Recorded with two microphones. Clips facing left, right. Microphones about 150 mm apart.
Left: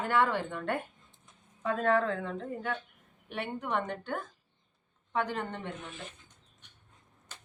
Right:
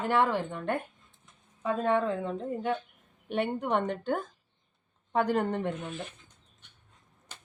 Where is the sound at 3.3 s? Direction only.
35° right (ahead or behind).